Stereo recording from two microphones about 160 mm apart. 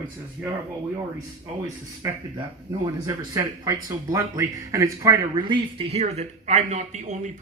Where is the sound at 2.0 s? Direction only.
15° right (ahead or behind).